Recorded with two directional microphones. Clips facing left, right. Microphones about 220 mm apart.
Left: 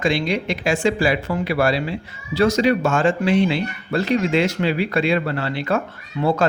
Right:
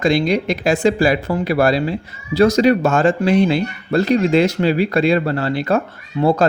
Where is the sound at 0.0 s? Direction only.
40° right (ahead or behind).